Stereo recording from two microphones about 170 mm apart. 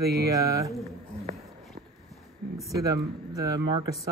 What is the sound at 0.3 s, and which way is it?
Speech, 20° right (ahead or behind).